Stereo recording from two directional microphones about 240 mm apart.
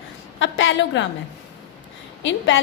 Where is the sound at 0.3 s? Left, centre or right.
Left.